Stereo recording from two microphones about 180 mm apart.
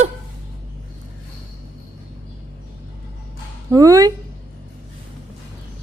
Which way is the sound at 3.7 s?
20° right (ahead or behind).